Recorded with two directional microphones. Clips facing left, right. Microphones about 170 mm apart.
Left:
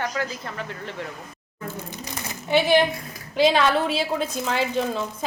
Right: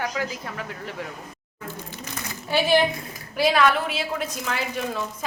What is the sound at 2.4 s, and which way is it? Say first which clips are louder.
A woman's voice: left 2 dB; 20° left (ahead or behind).